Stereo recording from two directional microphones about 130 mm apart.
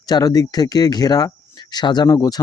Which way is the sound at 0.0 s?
30° left (ahead or behind).